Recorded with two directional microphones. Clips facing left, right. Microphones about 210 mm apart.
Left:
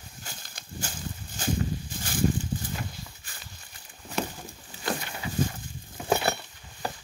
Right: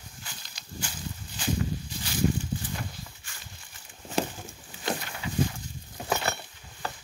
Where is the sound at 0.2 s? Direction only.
45° left (ahead or behind).